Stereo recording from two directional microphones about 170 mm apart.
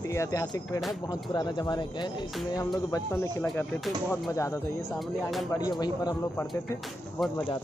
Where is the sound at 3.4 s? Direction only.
5° left (ahead or behind).